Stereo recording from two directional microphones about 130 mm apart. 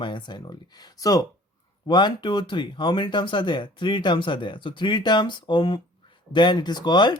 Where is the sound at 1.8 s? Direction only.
35° left (ahead or behind).